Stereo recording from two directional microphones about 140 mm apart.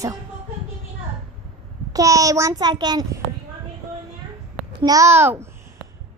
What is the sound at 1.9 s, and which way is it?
A child's voice, 25° right (ahead or behind).